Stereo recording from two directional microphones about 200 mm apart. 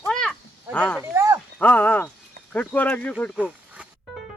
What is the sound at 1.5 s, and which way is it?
Speech, 10° left (ahead or behind).